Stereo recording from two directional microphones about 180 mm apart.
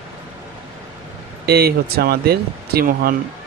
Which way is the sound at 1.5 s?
60° right (ahead or behind).